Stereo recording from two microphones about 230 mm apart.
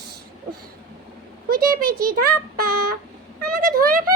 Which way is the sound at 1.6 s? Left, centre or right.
Right.